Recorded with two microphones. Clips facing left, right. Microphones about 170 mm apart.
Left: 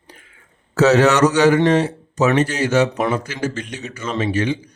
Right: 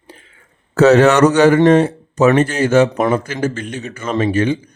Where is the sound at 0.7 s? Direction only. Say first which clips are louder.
Right 4 dB; 55° right (ahead or behind).